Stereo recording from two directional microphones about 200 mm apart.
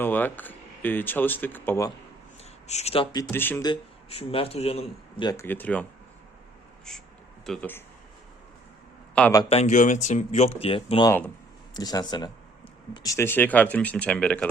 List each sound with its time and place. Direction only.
0.0 s speech: 10° left (ahead or behind)
2.4 s speech: 35° left (ahead or behind)
3.3 s speech: 10° left (ahead or behind)
3.7 s speech: 30° left (ahead or behind)
5.2 s speech: 15° left (ahead or behind)
7.4 s speech: 5° left (ahead or behind)
9.3 s speech: 25° left (ahead or behind); by 14.4 s 5° left (ahead or behind)